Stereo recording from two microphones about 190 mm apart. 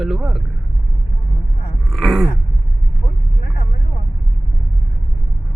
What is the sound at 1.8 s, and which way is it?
Groan, centre (ahead or behind).